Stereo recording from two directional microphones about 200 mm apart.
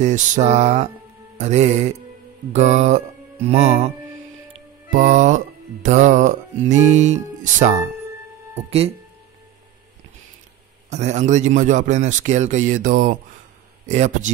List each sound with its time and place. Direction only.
0.0 s speech: 35° right (ahead or behind)
4.9 s speech: 35° right (ahead or behind)
10.9 s speech: 35° right (ahead or behind)